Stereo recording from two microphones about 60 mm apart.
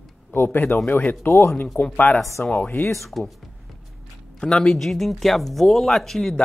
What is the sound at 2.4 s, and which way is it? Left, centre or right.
Speech, left.